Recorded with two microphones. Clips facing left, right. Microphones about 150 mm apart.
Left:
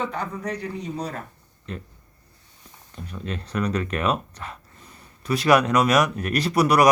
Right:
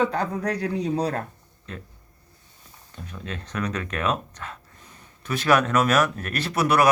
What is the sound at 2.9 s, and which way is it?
Speech, 10° left (ahead or behind).